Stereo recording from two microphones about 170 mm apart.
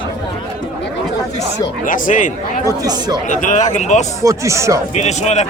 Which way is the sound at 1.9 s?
50° left (ahead or behind).